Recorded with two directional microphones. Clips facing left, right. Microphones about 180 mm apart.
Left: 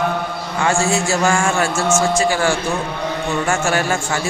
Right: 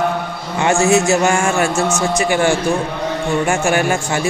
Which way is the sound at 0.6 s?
20° right (ahead or behind).